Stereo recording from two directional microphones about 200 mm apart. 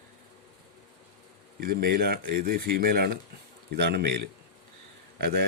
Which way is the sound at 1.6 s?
50° right (ahead or behind).